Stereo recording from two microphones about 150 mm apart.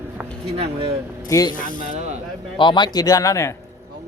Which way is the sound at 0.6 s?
40° right (ahead or behind).